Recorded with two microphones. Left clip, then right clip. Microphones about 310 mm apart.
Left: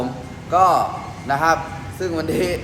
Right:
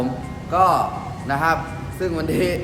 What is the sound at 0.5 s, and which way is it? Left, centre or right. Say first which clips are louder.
A man's voice: left 2 dB; centre.